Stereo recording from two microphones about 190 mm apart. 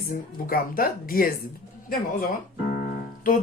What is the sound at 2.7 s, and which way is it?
Piano, 50° left (ahead or behind).